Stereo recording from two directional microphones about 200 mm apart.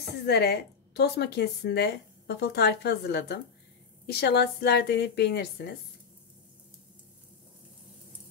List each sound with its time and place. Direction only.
0.3 s a woman's voice: 55° left (ahead or behind)